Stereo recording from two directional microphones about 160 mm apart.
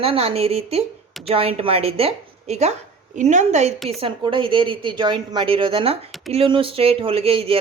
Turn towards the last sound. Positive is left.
turn(degrees=-35)  # may be behind; listen again after turning